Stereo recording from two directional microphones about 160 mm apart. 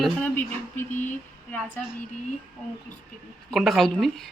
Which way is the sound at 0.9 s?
50° left (ahead or behind).